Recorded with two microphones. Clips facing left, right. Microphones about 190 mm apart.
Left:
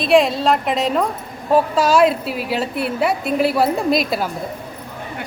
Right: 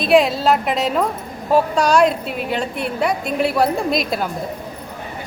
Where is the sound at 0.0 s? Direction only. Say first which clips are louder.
Even; centre (ahead or behind).